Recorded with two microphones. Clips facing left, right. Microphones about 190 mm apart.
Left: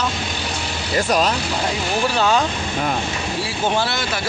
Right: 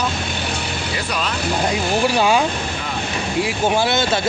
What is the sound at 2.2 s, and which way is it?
Speech, 10° right (ahead or behind).